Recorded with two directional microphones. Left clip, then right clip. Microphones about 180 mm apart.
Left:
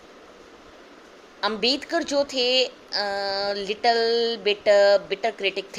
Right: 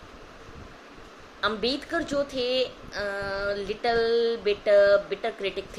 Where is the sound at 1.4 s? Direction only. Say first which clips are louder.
Left 3 dB; 30° left (ahead or behind).